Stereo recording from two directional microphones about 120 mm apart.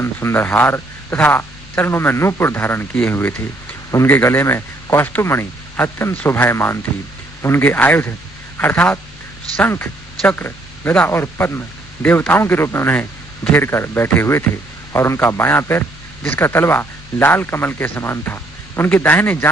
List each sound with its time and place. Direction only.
0.0 s a man's voice: 20° left (ahead or behind)